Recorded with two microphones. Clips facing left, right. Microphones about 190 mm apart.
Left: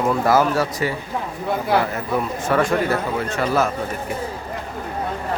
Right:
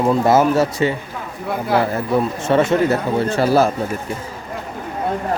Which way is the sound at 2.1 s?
25° right (ahead or behind).